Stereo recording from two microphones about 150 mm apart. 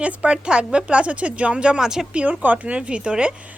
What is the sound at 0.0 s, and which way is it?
A woman's voice, 5° right (ahead or behind).